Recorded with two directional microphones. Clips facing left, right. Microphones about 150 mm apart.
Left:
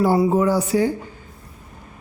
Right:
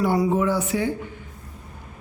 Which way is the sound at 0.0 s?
30° left (ahead or behind).